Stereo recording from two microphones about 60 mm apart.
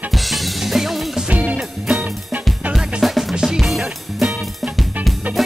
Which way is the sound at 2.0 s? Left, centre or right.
Right.